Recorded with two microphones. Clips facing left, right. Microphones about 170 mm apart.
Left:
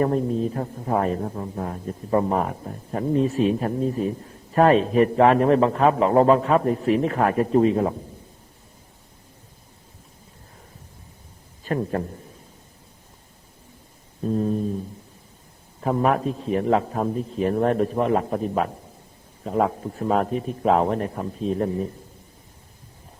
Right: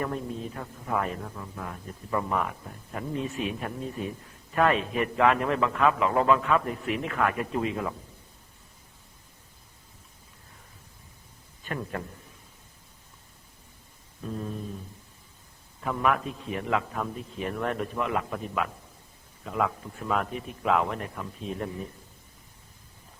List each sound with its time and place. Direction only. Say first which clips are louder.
0.0 s a man's voice: left 10 dB; 35° left (ahead or behind)
11.6 s a man's voice: left 9 dB; 35° left (ahead or behind)
14.2 s a man's voice: left 11 dB; 35° left (ahead or behind)
15.8 s a man's voice: left 6 dB; 35° left (ahead or behind)